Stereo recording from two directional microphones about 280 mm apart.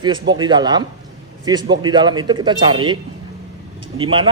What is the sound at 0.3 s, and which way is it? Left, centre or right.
A man's voice, centre.